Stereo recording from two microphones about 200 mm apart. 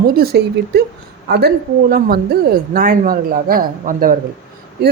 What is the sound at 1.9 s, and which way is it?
Speech, 50° right (ahead or behind).